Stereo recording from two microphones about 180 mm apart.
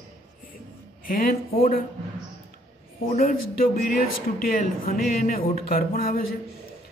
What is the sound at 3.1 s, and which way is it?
Speech, 55° left (ahead or behind).